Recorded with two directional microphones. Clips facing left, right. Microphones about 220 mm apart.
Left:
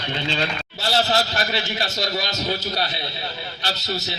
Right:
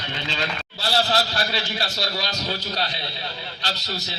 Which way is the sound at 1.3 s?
20° left (ahead or behind).